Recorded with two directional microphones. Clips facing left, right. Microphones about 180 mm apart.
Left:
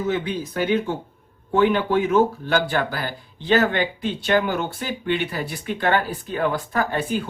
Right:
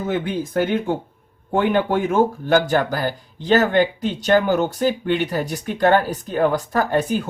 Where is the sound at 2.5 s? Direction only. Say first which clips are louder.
Right 4 dB; 45° right (ahead or behind).